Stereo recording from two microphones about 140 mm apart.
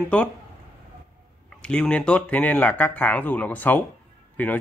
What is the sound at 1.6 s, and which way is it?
Speech, 5° left (ahead or behind).